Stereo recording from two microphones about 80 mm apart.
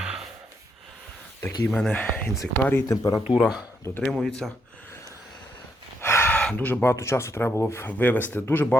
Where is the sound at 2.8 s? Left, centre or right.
Left.